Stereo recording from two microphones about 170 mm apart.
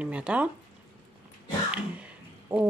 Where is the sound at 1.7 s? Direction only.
5° right (ahead or behind).